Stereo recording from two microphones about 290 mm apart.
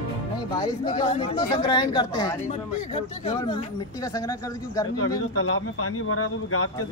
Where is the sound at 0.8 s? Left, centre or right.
Centre.